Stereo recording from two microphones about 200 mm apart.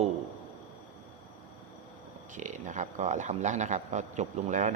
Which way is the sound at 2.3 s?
35° right (ahead or behind).